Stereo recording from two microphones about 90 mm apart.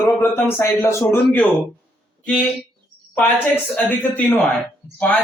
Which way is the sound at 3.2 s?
20° left (ahead or behind).